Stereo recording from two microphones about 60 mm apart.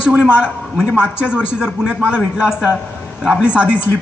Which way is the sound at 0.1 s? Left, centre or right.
Centre.